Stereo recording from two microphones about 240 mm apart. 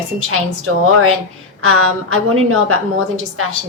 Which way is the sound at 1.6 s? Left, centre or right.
Right.